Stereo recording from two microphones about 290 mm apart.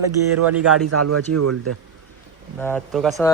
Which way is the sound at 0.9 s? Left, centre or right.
Right.